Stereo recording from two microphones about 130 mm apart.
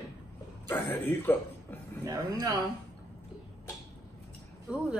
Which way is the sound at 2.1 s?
30° right (ahead or behind).